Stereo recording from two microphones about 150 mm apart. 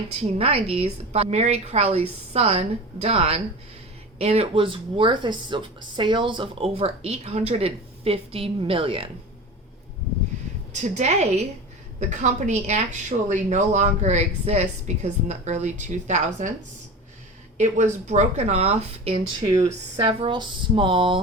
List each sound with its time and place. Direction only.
0.2 s a woman's voice: 40° right (ahead or behind)
10.7 s a woman's voice: 50° right (ahead or behind)
17.6 s a woman's voice: 55° right (ahead or behind)
19.4 s speech: 20° right (ahead or behind)
20.1 s speech: 35° right (ahead or behind)